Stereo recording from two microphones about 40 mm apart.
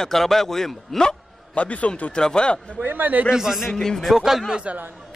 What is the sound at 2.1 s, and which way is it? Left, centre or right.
Speech, left.